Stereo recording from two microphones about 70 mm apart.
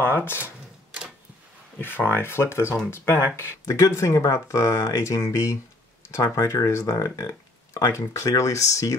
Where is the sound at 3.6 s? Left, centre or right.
Left.